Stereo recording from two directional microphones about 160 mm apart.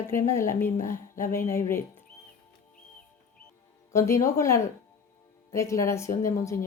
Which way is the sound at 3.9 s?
20° left (ahead or behind).